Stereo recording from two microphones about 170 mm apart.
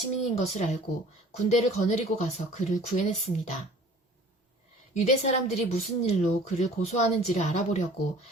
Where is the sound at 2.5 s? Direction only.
45° left (ahead or behind).